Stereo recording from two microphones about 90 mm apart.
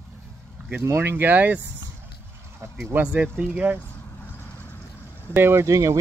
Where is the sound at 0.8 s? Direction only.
25° right (ahead or behind).